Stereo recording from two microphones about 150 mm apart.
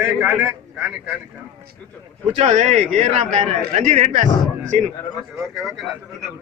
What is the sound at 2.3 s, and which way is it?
A man's voice, 50° right (ahead or behind).